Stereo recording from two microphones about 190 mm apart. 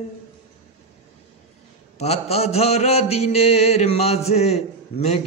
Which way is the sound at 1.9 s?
35° left (ahead or behind).